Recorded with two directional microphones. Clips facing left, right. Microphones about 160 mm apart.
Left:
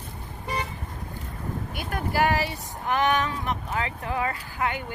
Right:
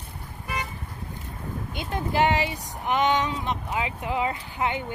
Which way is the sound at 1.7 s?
25° right (ahead or behind).